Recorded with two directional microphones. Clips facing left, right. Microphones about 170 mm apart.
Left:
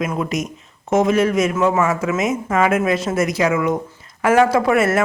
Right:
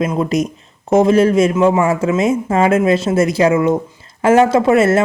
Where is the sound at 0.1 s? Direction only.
30° right (ahead or behind).